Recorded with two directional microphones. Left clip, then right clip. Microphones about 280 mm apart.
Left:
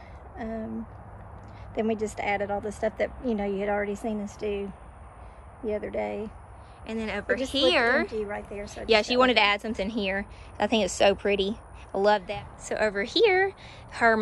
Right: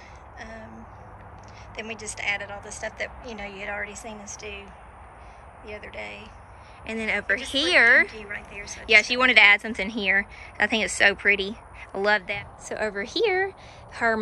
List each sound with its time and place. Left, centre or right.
0.4 s a sound: left
1.8 s speech: left
6.9 s a woman's voice: centre
8.1 s speech: centre
8.8 s a woman's voice: centre